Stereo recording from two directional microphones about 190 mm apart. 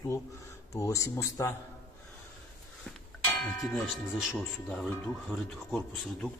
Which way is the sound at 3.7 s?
Centre (ahead or behind).